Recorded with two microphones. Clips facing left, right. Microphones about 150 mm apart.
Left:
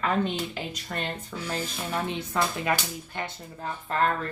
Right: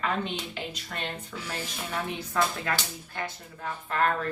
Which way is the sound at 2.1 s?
20° left (ahead or behind).